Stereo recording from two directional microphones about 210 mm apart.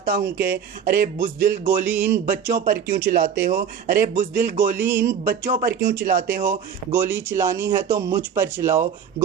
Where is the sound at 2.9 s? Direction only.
35° right (ahead or behind).